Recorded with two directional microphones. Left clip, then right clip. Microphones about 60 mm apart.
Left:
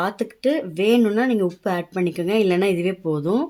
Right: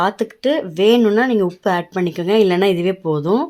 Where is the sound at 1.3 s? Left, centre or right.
Right.